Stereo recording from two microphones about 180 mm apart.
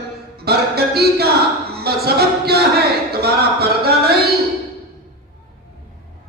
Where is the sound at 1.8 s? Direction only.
60° right (ahead or behind).